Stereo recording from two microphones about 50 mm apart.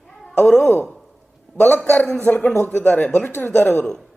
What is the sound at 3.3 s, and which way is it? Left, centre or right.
Speech, left.